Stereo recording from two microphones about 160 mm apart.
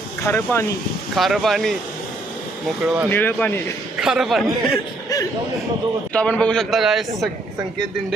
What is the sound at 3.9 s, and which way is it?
Speech, 5° right (ahead or behind).